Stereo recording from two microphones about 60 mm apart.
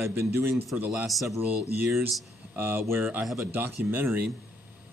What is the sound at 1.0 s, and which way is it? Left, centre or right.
Speech, centre.